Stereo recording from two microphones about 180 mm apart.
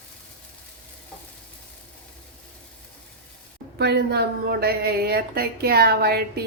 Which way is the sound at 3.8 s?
65° right (ahead or behind).